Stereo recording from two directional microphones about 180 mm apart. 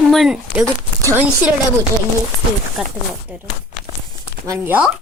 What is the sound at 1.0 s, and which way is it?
Speech, 10° right (ahead or behind).